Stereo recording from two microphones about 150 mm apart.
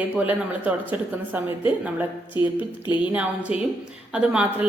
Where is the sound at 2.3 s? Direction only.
30° left (ahead or behind).